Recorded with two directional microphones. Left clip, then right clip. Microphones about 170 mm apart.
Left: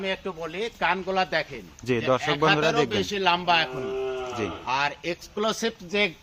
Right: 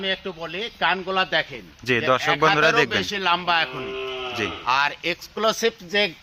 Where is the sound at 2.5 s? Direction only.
30° right (ahead or behind).